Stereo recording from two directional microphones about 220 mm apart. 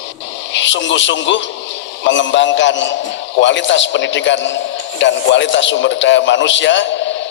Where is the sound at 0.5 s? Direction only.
55° left (ahead or behind).